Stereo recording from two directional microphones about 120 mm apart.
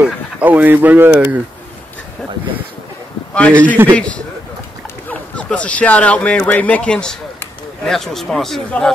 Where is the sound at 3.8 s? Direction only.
15° right (ahead or behind).